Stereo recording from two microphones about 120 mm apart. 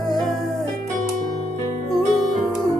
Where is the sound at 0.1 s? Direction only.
Centre (ahead or behind).